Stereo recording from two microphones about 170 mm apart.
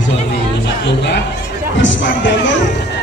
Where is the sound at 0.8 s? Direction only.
90° left.